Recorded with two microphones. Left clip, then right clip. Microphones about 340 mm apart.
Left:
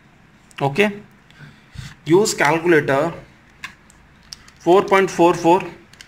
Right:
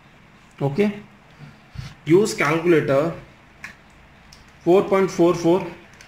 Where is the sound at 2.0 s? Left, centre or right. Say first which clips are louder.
Left 2 dB; centre.